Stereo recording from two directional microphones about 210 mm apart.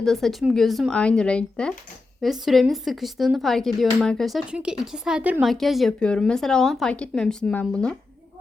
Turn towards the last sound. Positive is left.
turn(degrees=5)  # may be behind; listen again after turning